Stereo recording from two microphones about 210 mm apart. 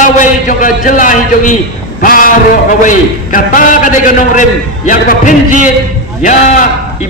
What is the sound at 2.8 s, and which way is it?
A man's voice, 40° left (ahead or behind).